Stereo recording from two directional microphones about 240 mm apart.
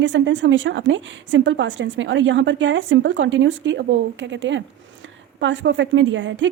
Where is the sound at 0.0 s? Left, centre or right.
Right.